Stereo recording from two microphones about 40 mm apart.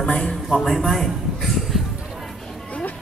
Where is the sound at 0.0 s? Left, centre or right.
Left.